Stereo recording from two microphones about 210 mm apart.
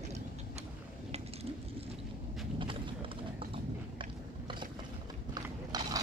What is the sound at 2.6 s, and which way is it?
Clip-clop, 25° right (ahead or behind).